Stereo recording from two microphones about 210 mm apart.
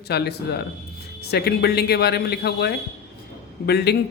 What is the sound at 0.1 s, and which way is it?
A woman's voice, 50° left (ahead or behind).